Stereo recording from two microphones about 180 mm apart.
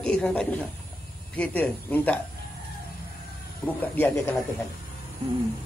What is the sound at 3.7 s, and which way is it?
Speech, 10° left (ahead or behind).